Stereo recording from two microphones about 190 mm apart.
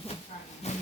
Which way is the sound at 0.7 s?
35° left (ahead or behind).